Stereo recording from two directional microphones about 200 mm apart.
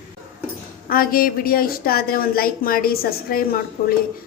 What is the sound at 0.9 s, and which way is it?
A woman's voice, 45° left (ahead or behind).